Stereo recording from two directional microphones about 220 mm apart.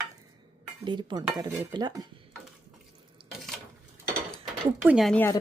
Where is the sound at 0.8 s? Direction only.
20° right (ahead or behind).